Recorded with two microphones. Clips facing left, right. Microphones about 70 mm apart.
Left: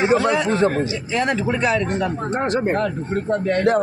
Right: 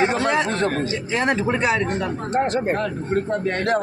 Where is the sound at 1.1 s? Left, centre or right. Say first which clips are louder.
Even; right.